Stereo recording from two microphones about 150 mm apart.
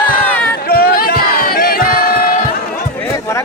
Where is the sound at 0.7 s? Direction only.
90° left.